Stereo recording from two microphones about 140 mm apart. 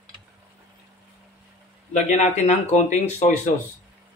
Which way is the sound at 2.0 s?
55° left (ahead or behind).